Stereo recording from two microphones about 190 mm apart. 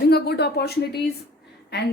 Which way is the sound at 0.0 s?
60° left (ahead or behind).